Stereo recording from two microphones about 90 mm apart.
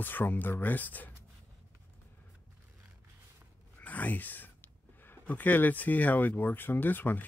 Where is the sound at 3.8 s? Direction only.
15° left (ahead or behind).